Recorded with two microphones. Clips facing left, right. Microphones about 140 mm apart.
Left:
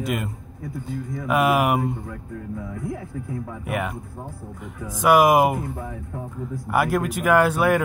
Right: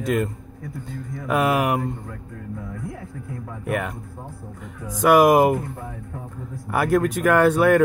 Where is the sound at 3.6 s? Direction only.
5° left (ahead or behind).